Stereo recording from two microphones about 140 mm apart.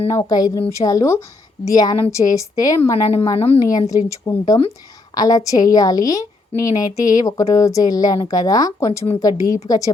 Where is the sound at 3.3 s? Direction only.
45° left (ahead or behind).